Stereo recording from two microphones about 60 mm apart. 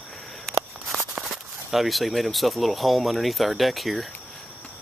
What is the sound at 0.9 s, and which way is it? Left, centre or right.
Speech, centre.